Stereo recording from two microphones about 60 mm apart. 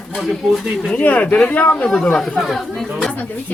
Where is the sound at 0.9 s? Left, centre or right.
Left.